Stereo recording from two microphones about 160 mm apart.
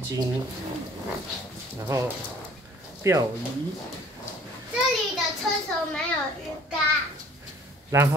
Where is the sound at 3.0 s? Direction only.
15° right (ahead or behind).